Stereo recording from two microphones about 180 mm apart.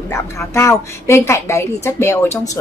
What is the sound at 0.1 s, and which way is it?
A woman's voice, 15° left (ahead or behind).